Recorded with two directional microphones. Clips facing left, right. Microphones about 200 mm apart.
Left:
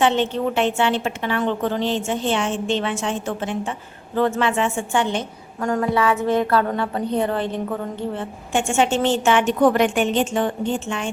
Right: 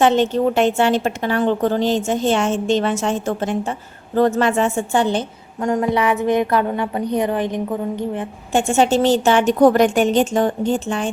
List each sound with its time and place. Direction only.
0.0 s a woman's voice: 40° right (ahead or behind)
5.5 s a woman's voice: 20° right (ahead or behind)
8.5 s a woman's voice: 40° right (ahead or behind)